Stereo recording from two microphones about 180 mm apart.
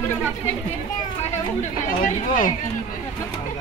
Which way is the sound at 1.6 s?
45° left (ahead or behind).